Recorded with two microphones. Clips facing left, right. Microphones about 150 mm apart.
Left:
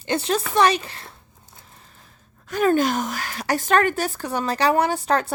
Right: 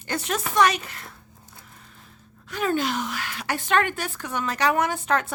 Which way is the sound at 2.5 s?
45° left (ahead or behind).